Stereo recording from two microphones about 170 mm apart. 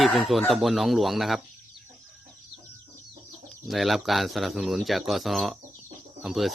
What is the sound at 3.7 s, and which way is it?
Chicken, centre (ahead or behind).